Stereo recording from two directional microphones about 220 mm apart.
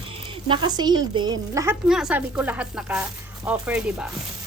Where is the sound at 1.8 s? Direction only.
5° right (ahead or behind).